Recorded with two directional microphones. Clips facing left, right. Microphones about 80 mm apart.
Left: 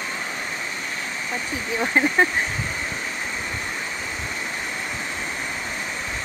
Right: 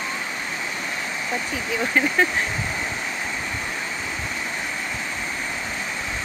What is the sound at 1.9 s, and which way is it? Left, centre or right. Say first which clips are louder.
Speech: left 1 dB; left.